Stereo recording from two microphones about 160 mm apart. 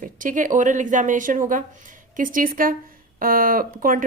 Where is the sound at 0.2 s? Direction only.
55° right (ahead or behind).